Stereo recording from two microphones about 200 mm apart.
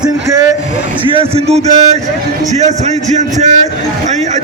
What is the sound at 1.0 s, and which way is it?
Speech, 25° right (ahead or behind).